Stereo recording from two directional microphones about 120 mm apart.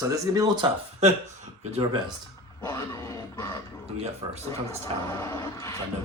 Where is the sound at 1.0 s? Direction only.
65° right (ahead or behind).